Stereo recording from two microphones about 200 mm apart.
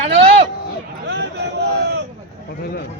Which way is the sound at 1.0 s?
60° right (ahead or behind).